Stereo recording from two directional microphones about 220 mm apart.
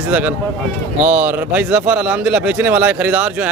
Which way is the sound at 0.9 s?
5° right (ahead or behind).